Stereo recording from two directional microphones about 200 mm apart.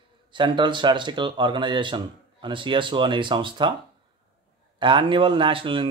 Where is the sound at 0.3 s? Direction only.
25° right (ahead or behind).